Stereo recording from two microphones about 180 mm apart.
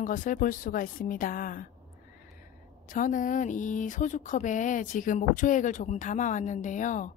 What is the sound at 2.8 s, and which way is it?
Speech, 45° left (ahead or behind).